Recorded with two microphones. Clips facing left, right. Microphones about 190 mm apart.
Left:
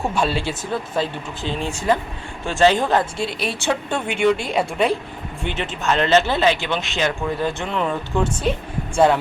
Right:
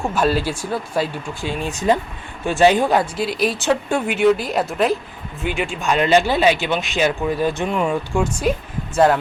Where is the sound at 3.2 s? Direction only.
Centre (ahead or behind).